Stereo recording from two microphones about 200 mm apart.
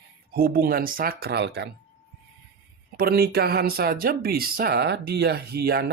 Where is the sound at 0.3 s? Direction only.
50° right (ahead or behind).